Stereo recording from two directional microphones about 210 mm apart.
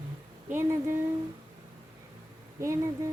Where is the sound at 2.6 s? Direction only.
15° right (ahead or behind).